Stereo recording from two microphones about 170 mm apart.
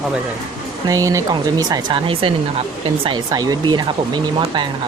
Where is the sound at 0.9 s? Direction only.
20° right (ahead or behind).